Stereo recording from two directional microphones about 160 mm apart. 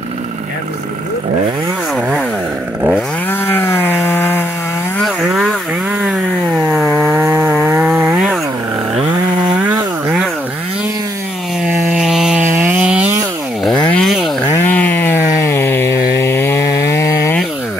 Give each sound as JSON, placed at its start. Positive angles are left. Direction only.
{"t": 3.3, "sound": "wood", "side_deg": 15}
{"t": 4.9, "sound": "chainsaw", "side_deg": 0}
{"t": 9.6, "sound": "chainsaw", "side_deg": -15}
{"t": 11.6, "sound": "a sound", "side_deg": -10}
{"t": 13.8, "sound": "a sound", "side_deg": 5}
{"t": 14.6, "sound": "chainsaw", "side_deg": 10}